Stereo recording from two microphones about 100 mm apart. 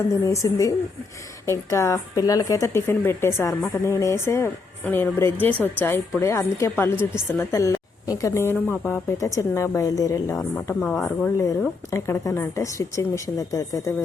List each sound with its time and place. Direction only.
0.1 s a woman's voice: 35° left (ahead or behind)
7.5 s a woman's voice: 30° left (ahead or behind)
10.8 s a woman's voice: 10° left (ahead or behind)
11.9 s a woman's voice: 30° left (ahead or behind)